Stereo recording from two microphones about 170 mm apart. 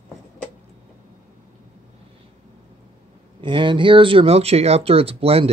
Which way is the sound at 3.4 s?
30° right (ahead or behind).